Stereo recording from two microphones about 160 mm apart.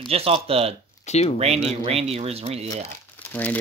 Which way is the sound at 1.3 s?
40° right (ahead or behind).